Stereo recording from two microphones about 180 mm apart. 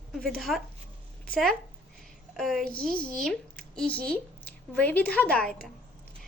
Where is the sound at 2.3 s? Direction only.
Centre (ahead or behind).